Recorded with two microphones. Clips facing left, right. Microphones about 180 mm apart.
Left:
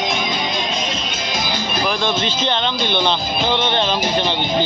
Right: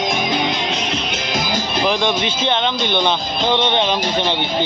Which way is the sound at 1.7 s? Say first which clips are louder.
Right 2 dB; 20° right (ahead or behind).